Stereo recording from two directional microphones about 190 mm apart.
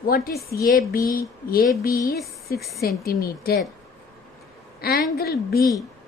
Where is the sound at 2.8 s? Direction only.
55° left (ahead or behind).